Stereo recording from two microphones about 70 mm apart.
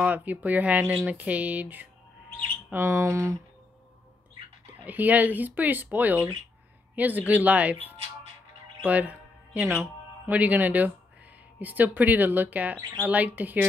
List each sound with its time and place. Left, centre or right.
0.0 s speech: right
2.7 s speech: right
4.8 s speech: right
8.8 s music: right
10.3 s speech: right